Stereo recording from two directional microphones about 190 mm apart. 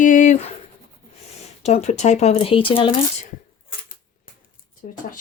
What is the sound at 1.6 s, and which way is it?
Speech, 35° left (ahead or behind).